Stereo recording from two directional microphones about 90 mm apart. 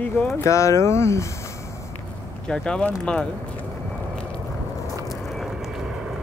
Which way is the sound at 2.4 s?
10° left (ahead or behind).